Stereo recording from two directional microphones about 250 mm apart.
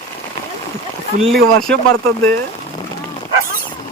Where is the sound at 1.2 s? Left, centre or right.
Centre.